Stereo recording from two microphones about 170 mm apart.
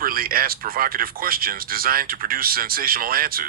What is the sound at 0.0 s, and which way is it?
Speech, 60° right (ahead or behind).